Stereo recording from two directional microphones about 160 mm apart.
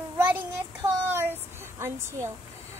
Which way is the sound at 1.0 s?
10° right (ahead or behind).